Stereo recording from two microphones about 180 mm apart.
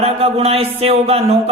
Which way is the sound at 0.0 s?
35° right (ahead or behind).